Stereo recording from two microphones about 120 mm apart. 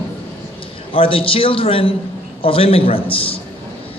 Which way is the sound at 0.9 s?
50° left (ahead or behind).